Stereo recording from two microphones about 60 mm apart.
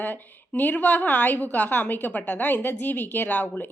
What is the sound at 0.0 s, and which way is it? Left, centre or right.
Speech, left.